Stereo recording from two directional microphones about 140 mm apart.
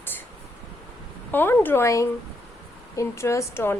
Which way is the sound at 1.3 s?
15° left (ahead or behind).